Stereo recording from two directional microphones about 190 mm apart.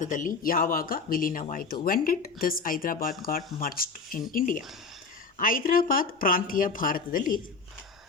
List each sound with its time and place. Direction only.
0.0 s speech: 45° left (ahead or behind)